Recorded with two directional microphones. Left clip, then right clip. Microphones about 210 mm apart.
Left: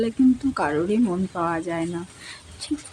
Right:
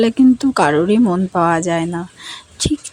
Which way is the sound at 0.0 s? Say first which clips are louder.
Right 8 dB; 40° right (ahead or behind).